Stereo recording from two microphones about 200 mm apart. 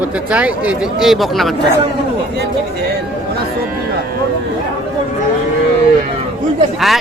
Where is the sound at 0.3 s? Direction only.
5° right (ahead or behind).